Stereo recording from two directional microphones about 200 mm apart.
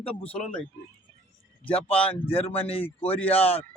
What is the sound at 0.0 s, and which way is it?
Speech, 30° left (ahead or behind).